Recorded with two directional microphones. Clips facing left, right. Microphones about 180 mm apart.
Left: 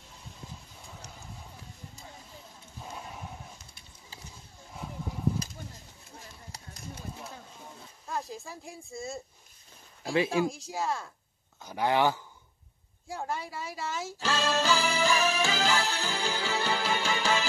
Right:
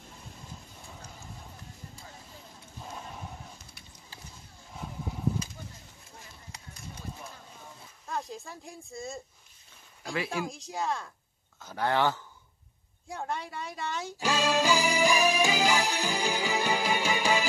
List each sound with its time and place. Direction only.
2.8 s horse: 5° left (ahead or behind)
8.1 s speech: centre (ahead or behind)
10.1 s speech: 20° left (ahead or behind)
10.4 s speech: centre (ahead or behind)
11.6 s speech: 15° left (ahead or behind)
13.1 s speech: centre (ahead or behind)
14.1 s music: 15° right (ahead or behind)